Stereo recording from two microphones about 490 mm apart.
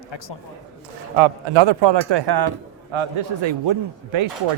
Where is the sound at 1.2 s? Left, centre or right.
Right.